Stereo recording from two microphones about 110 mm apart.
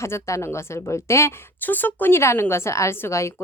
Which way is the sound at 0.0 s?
25° left (ahead or behind).